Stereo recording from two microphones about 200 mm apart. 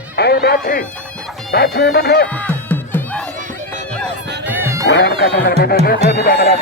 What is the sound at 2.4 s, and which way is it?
Music, 10° left (ahead or behind).